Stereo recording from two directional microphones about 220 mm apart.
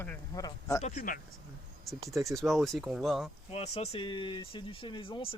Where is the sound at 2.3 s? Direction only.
Centre (ahead or behind).